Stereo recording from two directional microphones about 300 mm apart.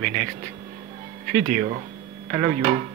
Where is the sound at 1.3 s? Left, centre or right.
Right.